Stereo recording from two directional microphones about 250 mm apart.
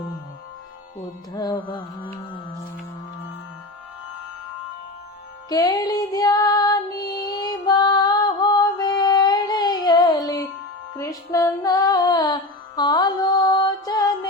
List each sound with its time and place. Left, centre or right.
1.3 s music: centre
5.5 s music: centre